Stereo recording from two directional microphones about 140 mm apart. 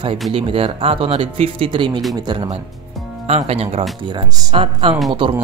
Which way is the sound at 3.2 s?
45° right (ahead or behind).